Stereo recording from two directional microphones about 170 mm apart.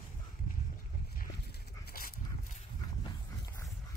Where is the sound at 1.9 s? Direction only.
55° left (ahead or behind).